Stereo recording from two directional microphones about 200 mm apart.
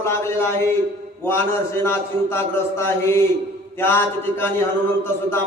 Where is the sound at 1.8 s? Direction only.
10° left (ahead or behind).